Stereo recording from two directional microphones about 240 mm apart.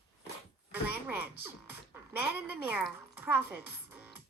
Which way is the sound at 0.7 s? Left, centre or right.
Centre.